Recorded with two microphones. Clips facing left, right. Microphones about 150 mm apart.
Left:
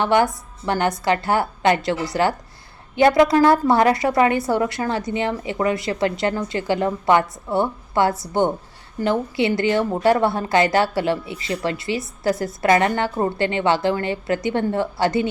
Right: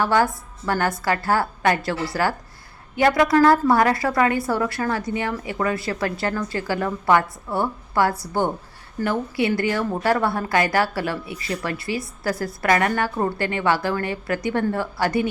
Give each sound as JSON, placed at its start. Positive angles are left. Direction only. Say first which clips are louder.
{"t": 0.0, "sound": "a woman's voice", "louder": "left 2 dB", "side_deg": 20}